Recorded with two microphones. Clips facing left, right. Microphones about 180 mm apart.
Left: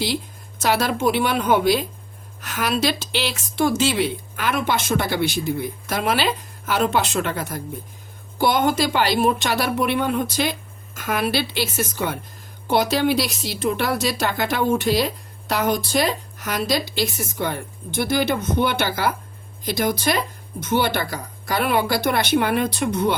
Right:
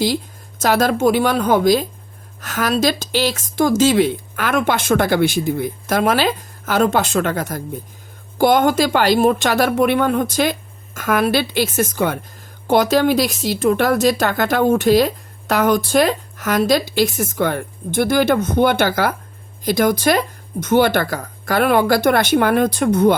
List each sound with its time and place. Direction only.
0.6 s a woman's voice: 45° right (ahead or behind)